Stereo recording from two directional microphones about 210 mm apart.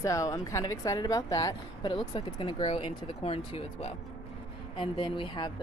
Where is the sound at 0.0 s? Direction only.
15° left (ahead or behind).